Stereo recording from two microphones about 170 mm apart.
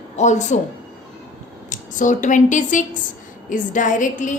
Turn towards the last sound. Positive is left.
turn(degrees=50)  # may be behind; listen again after turning